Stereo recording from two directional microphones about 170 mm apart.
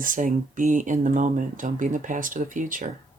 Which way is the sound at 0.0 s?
55° right (ahead or behind).